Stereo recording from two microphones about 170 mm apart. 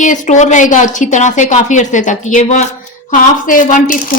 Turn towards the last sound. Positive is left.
turn(degrees=50)  # may be behind; listen again after turning